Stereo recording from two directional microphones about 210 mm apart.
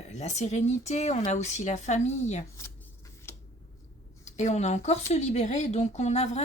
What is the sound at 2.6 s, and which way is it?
Scissors, 10° left (ahead or behind).